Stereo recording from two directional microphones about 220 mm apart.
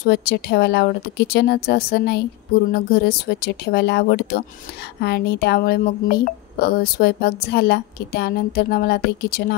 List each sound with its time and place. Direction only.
0.0 s a woman's voice: 45° left (ahead or behind)